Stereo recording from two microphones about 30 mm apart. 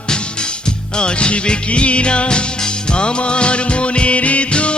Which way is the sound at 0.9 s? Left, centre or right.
Left.